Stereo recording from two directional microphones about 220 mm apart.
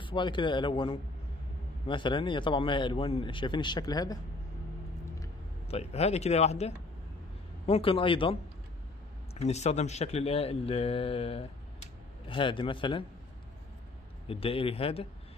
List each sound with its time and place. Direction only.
0.0 s a man's voice: 20° left (ahead or behind)
5.7 s a man's voice: 30° left (ahead or behind)
14.2 s a man's voice: 25° left (ahead or behind)